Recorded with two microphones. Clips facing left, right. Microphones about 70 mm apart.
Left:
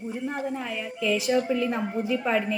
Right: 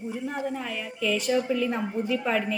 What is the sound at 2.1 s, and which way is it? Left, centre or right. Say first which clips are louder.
Speech: left 2 dB; centre.